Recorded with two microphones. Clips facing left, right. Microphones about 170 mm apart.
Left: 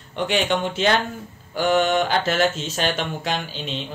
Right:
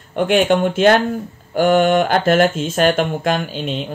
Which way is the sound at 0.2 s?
50° right (ahead or behind).